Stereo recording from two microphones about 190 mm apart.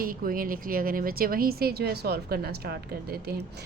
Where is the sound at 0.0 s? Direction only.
50° right (ahead or behind).